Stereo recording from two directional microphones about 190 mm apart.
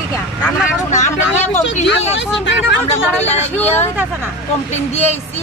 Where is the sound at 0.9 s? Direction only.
40° left (ahead or behind).